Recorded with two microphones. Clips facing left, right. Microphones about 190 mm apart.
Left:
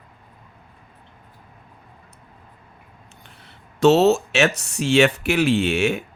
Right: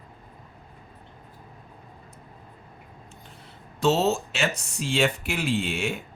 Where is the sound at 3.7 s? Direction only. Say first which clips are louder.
Left 8 dB; 70° left (ahead or behind).